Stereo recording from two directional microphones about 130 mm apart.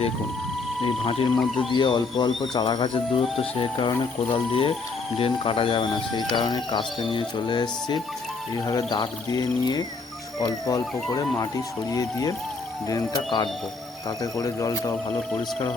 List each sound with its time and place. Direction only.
0.9 s speech: 45° left (ahead or behind)
1.4 s speech: centre (ahead or behind)
1.7 s speech: 35° left (ahead or behind)